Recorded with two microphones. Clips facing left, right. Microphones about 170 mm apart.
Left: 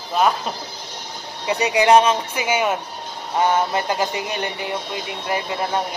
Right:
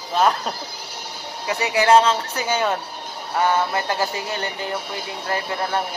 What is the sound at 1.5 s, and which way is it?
A man's voice, 20° left (ahead or behind).